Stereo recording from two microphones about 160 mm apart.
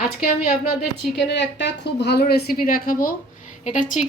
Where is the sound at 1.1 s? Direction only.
90° left.